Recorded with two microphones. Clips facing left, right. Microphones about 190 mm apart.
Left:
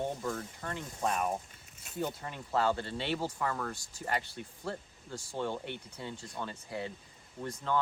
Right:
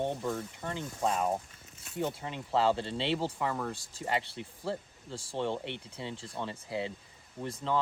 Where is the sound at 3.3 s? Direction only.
15° right (ahead or behind).